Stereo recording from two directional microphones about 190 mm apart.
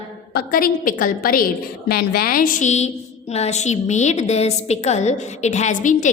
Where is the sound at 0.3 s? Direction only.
50° left (ahead or behind).